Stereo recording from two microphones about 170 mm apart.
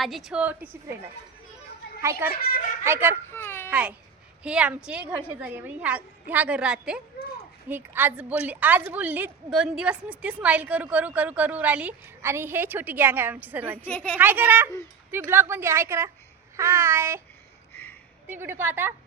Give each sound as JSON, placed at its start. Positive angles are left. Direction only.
{"t": 0.0, "sound": "a woman's voice", "side_deg": 0}
{"t": 2.0, "sound": "a woman's voice", "side_deg": -15}
{"t": 2.3, "sound": "a child's voice", "side_deg": 55}
{"t": 2.8, "sound": "a woman's voice", "side_deg": -15}
{"t": 3.3, "sound": "a child's voice", "side_deg": 15}
{"t": 3.7, "sound": "a child's voice", "side_deg": -10}
{"t": 13.8, "sound": "speech", "side_deg": 10}
{"t": 14.2, "sound": "a woman's voice", "side_deg": -10}
{"t": 18.3, "sound": "a woman's voice", "side_deg": -15}